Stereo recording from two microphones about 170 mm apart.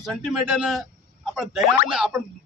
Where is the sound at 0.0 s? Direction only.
Centre (ahead or behind).